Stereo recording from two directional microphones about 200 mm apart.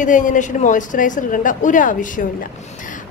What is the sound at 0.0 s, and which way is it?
A woman's voice, 40° left (ahead or behind).